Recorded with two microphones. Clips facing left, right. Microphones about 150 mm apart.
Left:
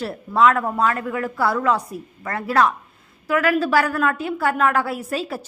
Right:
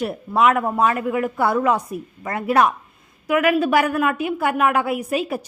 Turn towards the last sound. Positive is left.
turn(degrees=-15)  # may be behind; listen again after turning